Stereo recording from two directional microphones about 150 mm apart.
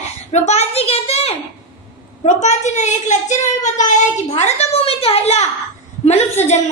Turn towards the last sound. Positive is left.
turn(degrees=45)  # may be behind; listen again after turning